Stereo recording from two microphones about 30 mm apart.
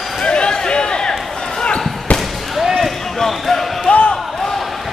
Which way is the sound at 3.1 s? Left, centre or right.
Centre.